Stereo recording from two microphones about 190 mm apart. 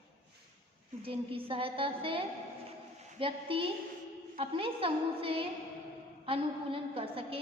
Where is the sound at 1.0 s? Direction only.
30° right (ahead or behind).